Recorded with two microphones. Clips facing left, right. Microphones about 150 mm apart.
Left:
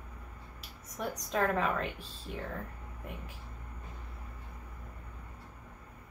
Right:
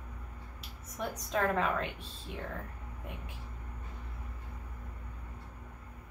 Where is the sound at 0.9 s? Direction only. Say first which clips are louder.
Even; centre (ahead or behind).